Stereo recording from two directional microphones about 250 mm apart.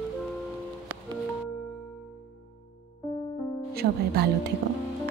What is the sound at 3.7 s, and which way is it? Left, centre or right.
Speech, right.